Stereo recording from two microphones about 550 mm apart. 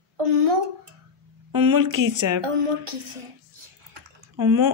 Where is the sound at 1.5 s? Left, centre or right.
Right.